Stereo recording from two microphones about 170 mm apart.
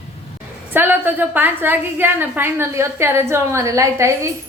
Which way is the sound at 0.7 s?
10° right (ahead or behind).